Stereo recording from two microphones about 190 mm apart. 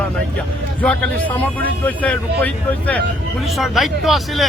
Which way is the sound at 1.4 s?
10° left (ahead or behind).